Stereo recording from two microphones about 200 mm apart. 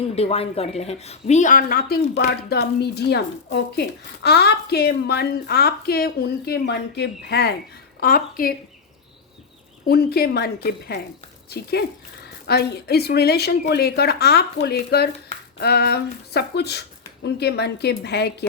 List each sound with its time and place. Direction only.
0.2 s speech: 30° left (ahead or behind); by 8.5 s 45° left (ahead or behind)
9.9 s a woman's voice: 50° left (ahead or behind)